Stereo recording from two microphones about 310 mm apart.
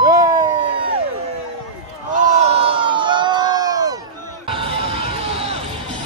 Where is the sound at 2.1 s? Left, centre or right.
Right.